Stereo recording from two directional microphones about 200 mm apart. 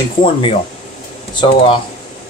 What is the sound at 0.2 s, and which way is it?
Speech, 25° left (ahead or behind).